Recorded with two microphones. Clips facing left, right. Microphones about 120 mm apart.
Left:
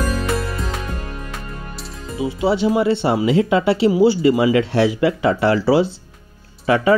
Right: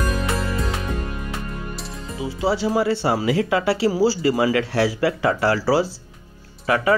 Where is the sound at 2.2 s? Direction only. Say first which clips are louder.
Left 4 dB; 25° left (ahead or behind).